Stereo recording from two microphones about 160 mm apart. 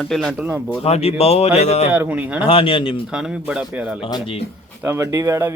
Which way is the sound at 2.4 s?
35° left (ahead or behind).